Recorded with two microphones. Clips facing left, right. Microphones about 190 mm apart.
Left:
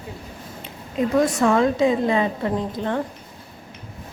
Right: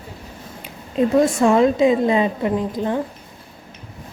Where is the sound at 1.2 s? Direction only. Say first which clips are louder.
Right 3 dB; 25° right (ahead or behind).